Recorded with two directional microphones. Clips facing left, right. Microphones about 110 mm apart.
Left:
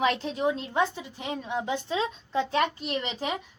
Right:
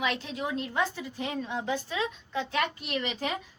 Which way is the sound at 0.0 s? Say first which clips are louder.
Left 6 dB; 35° left (ahead or behind).